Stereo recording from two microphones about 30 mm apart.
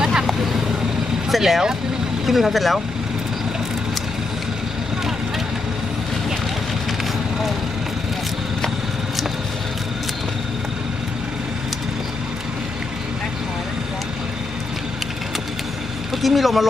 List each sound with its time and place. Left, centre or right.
0.0 s vehicle: right
1.3 s speech: centre
16.2 s speech: centre